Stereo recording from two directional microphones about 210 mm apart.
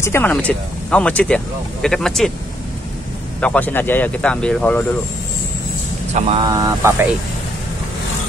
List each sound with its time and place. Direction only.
0.0 s speech: 10° left (ahead or behind)
3.3 s speech: 5° left (ahead or behind)
6.4 s speech: 15° right (ahead or behind)